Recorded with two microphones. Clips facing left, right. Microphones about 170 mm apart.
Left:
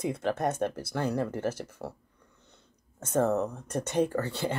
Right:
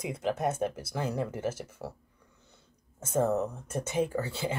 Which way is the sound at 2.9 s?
10° right (ahead or behind).